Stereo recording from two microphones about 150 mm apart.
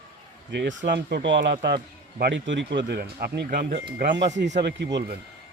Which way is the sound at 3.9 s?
70° right (ahead or behind).